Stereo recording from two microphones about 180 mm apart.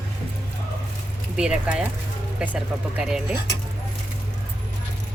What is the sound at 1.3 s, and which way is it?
Speech, 5° right (ahead or behind).